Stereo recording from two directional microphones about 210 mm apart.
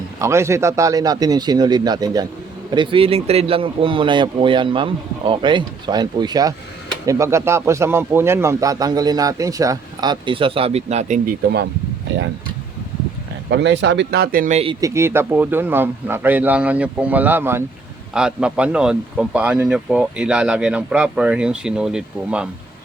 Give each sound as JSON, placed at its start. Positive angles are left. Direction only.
{"t": 0.2, "sound": "speech", "side_deg": -15}
{"t": 13.5, "sound": "speech", "side_deg": -60}
{"t": 14.8, "sound": "speech", "side_deg": -15}